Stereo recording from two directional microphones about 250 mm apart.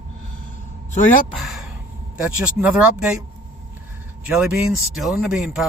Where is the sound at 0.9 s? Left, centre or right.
Left.